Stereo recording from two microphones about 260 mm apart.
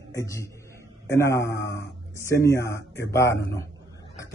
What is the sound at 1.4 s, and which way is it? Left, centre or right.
Speech, left.